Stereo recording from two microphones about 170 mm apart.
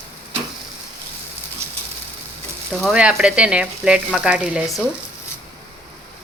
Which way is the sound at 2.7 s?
5° right (ahead or behind).